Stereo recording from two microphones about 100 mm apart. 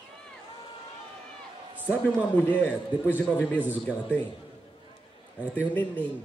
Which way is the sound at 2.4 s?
15° left (ahead or behind).